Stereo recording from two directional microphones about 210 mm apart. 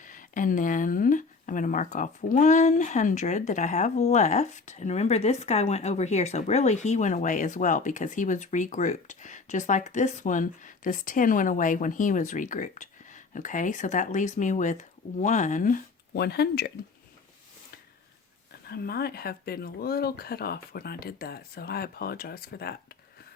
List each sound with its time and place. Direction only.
0.0 s speech: 40° left (ahead or behind)
18.7 s speech: 50° left (ahead or behind)